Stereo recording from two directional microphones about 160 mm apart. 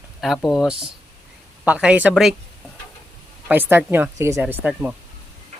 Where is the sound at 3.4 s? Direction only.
10° right (ahead or behind).